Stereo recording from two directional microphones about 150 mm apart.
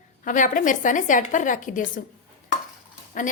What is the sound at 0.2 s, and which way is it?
A woman's voice, 60° left (ahead or behind).